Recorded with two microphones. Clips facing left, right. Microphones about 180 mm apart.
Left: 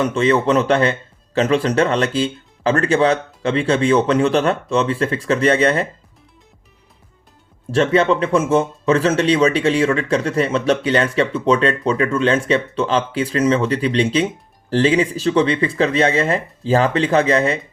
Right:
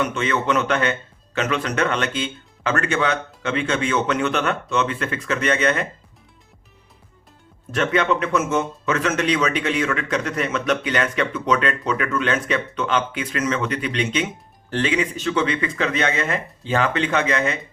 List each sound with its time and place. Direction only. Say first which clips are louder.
0.0 s speech: left 6 dB; 35° left (ahead or behind)
7.7 s speech: left 5 dB; 30° left (ahead or behind)